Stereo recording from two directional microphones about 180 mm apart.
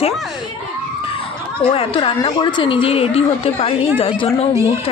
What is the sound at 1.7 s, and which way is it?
A woman's voice, 30° left (ahead or behind).